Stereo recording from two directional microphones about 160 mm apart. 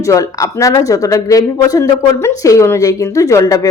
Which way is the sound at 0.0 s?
20° left (ahead or behind).